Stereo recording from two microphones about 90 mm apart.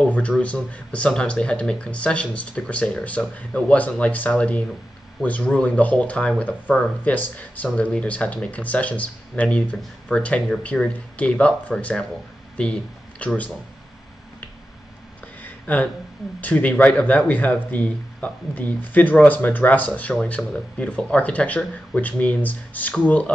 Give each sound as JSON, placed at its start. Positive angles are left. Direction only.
{"t": 0.4, "sound": "speech", "side_deg": 15}
{"t": 15.4, "sound": "a sound", "side_deg": 15}
{"t": 16.3, "sound": "speech", "side_deg": 15}